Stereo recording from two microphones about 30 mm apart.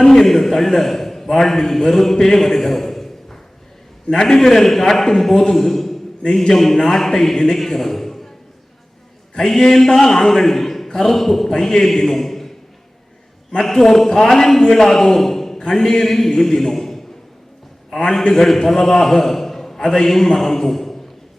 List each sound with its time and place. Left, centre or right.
0.0 s a man's voice: centre
4.4 s a man's voice: centre
9.4 s a man's voice: centre
13.6 s a man's voice: centre